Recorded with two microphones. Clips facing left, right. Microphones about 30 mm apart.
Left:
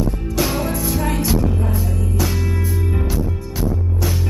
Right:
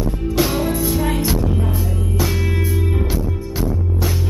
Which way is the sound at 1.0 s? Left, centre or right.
Right.